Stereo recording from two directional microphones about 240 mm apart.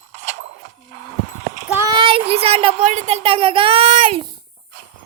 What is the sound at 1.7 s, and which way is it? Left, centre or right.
Speech, centre.